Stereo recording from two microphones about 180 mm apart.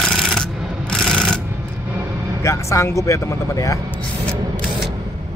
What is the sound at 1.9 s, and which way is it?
Vehicle, 15° right (ahead or behind).